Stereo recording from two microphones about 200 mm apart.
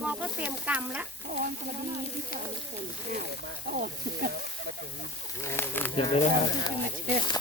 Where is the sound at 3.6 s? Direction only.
45° right (ahead or behind).